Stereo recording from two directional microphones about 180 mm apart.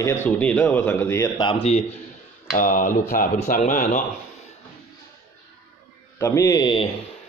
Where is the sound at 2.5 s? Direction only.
45° left (ahead or behind).